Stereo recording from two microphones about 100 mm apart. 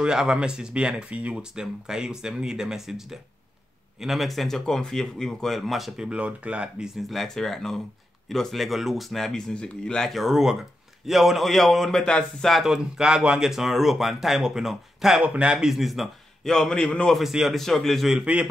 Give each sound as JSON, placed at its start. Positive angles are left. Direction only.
{"t": 0.0, "sound": "a man's voice", "side_deg": -5}